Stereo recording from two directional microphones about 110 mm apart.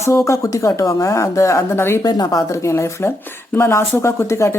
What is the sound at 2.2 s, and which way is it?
Speech, 25° left (ahead or behind).